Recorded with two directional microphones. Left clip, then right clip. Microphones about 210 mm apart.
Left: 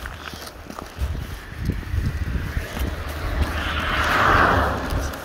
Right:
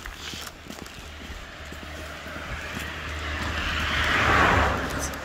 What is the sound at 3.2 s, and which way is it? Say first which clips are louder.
Vehicle: left 2 dB; 25° right (ahead or behind).